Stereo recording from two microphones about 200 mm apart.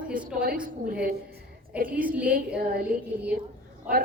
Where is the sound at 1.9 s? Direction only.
5° right (ahead or behind).